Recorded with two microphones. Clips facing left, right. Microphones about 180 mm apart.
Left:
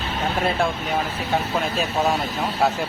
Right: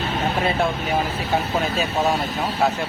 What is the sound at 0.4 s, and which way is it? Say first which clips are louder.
Speech: right 1 dB; centre (ahead or behind).